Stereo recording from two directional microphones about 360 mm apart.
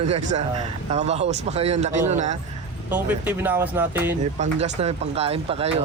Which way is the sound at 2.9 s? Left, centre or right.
Centre.